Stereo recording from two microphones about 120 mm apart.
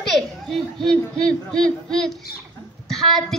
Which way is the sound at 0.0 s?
Centre (ahead or behind).